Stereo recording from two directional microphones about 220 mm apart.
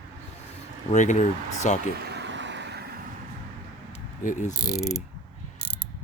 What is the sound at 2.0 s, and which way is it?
Vehicle, 50° right (ahead or behind).